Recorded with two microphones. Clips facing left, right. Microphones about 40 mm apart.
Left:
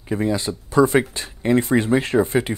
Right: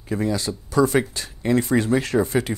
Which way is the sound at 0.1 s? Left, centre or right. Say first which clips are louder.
Left 2 dB; left.